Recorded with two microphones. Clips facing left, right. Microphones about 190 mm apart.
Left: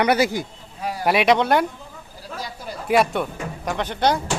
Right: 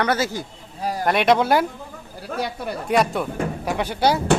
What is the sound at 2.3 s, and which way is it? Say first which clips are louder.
Speech: right 6 dB; 65° right (ahead or behind).